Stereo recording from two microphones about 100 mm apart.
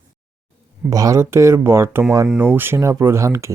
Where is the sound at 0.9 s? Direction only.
35° right (ahead or behind).